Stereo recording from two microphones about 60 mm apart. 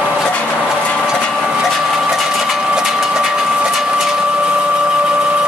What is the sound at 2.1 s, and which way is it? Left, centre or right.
Vehicle, centre.